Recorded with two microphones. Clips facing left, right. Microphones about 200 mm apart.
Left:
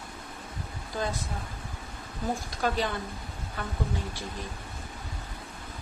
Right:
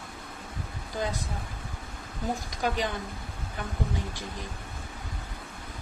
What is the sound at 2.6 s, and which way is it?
Speech, 15° right (ahead or behind).